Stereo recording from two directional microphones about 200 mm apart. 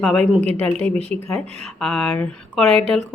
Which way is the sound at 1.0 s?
30° right (ahead or behind).